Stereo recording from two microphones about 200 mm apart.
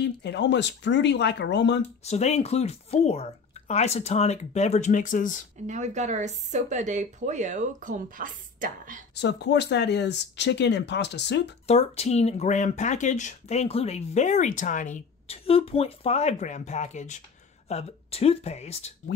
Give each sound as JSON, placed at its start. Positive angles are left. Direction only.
{"t": 0.0, "sound": "speech", "side_deg": 60}
{"t": 2.0, "sound": "speech", "side_deg": 35}
{"t": 5.7, "sound": "speech", "side_deg": -35}
{"t": 9.1, "sound": "speech", "side_deg": 60}
{"t": 11.6, "sound": "speech", "side_deg": 30}